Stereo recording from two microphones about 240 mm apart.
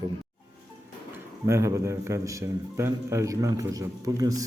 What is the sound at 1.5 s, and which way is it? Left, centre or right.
A man's voice, centre.